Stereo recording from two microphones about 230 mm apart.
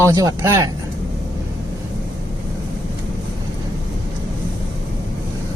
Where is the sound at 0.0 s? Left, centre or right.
Centre.